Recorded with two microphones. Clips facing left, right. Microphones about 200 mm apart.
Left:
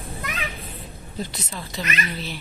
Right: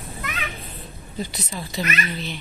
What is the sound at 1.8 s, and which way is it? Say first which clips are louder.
Speech: right 3 dB; 10° right (ahead or behind).